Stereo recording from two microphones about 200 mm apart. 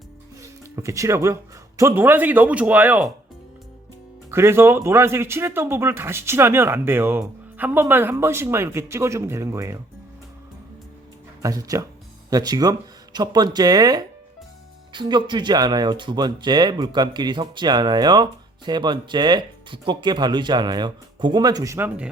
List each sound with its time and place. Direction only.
0.8 s speech: 15° right (ahead or behind)
4.3 s speech: 10° right (ahead or behind)
11.4 s speech: 15° right (ahead or behind)